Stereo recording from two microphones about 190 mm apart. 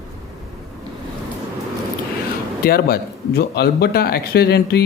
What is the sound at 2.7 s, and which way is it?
Speech, 55° left (ahead or behind).